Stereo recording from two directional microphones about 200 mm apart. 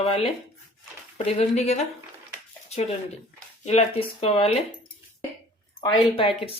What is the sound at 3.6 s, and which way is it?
Speech, 30° left (ahead or behind).